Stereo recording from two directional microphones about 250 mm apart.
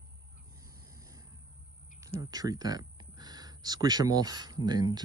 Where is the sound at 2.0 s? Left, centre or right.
Centre.